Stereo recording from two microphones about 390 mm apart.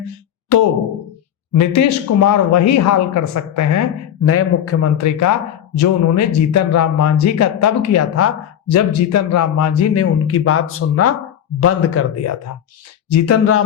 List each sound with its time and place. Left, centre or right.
0.5 s speech: left